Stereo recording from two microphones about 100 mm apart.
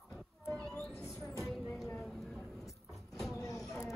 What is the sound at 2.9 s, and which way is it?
Vehicle, centre (ahead or behind).